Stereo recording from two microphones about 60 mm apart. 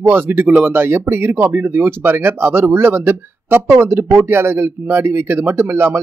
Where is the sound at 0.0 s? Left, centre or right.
Right.